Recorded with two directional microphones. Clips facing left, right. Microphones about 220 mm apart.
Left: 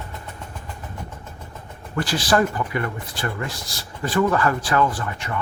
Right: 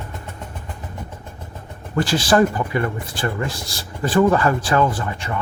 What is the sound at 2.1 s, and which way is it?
Speech, 25° right (ahead or behind).